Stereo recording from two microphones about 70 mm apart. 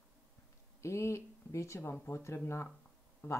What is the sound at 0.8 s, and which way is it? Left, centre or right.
Speech, left.